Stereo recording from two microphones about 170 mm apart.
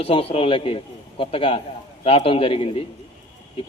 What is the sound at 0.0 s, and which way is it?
A man's voice, 35° left (ahead or behind).